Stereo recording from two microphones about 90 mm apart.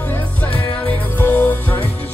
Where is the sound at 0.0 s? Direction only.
20° left (ahead or behind).